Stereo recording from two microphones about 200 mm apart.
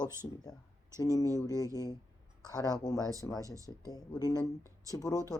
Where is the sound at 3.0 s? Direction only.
15° right (ahead or behind).